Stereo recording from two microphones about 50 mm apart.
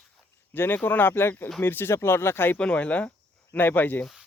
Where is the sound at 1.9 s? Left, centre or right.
Left.